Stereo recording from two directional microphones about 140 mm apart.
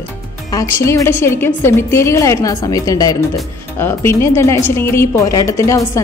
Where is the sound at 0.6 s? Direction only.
20° left (ahead or behind).